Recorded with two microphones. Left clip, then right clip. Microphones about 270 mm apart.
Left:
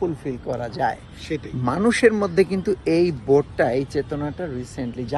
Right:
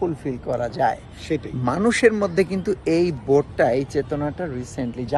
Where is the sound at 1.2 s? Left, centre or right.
Centre.